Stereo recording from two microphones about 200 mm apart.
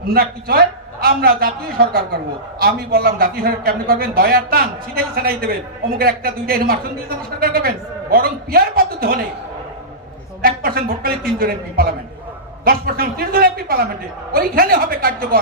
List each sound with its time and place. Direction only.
0.1 s a man's voice: 50° right (ahead or behind)
10.4 s a man's voice: 50° right (ahead or behind)